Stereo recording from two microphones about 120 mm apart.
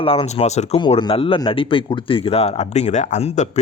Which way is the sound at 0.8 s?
45° left (ahead or behind).